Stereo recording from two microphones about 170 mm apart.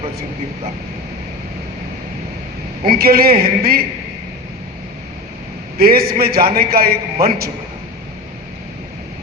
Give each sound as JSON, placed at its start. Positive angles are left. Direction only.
{"t": 2.8, "sound": "a man's voice", "side_deg": -60}
{"t": 5.7, "sound": "a man's voice", "side_deg": -60}